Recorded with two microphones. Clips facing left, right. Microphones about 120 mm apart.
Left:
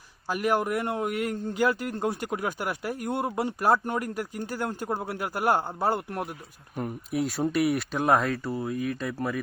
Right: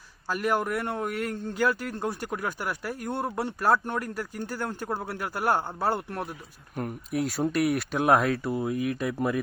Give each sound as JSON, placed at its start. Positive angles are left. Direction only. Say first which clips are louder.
{"t": 0.3, "sound": "speech", "louder": "left 1 dB", "side_deg": 10}
{"t": 6.7, "sound": "speech", "louder": "even", "side_deg": 0}